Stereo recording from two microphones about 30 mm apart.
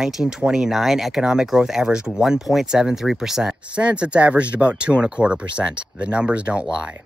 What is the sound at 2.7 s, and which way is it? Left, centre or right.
Speech, right.